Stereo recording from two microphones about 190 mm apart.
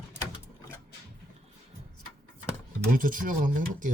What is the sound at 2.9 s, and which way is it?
Speech, 45° right (ahead or behind).